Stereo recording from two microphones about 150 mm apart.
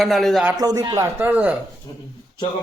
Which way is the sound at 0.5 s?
25° right (ahead or behind).